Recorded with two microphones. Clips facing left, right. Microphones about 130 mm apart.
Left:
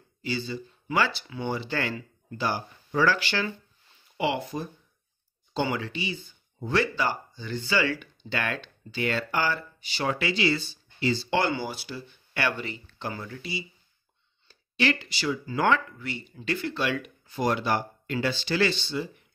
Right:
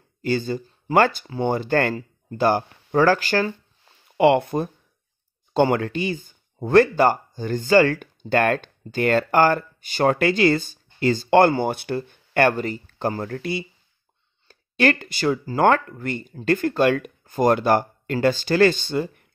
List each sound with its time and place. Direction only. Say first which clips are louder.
0.2 s speech: right 8 dB; 50° right (ahead or behind)
4.2 s speech: right 11 dB; 55° right (ahead or behind)